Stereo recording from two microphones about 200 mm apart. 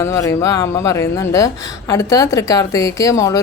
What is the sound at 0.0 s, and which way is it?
Speech, 15° left (ahead or behind).